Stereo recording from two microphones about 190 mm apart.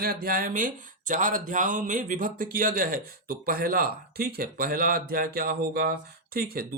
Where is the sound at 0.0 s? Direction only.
50° right (ahead or behind).